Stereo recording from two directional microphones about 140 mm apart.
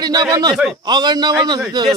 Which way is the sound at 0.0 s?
30° right (ahead or behind).